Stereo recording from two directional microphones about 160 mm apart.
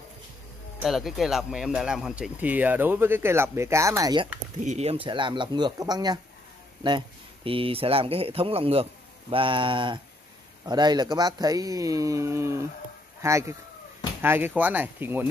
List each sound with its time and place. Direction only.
0.7 s speech: centre (ahead or behind); by 4.3 s 25° right (ahead or behind)
4.6 s speech: 40° right (ahead or behind); by 6.1 s 25° right (ahead or behind)
7.4 s speech: 35° right (ahead or behind); by 15.2 s 15° right (ahead or behind)